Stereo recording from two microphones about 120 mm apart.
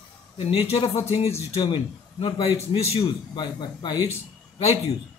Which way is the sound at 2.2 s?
50° left (ahead or behind).